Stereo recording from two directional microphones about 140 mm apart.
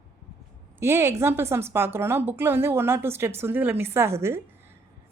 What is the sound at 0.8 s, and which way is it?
A woman's voice, 15° right (ahead or behind).